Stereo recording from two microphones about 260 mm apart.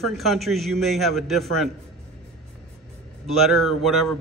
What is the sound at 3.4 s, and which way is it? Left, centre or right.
Speech, centre.